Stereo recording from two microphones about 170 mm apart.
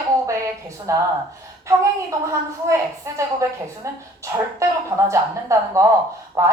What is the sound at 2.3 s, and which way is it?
A woman's voice, 15° right (ahead or behind).